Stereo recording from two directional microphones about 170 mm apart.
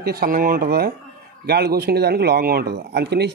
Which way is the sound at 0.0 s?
60° right (ahead or behind).